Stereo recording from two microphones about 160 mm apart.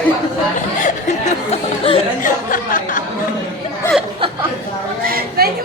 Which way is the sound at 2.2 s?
60° left (ahead or behind).